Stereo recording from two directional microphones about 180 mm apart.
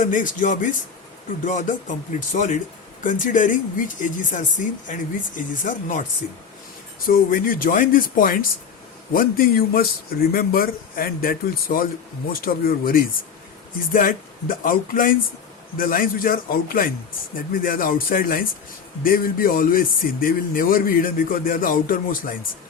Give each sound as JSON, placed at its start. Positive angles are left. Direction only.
{"t": 0.0, "sound": "a man's voice", "side_deg": 45}
{"t": 7.1, "sound": "a man's voice", "side_deg": 50}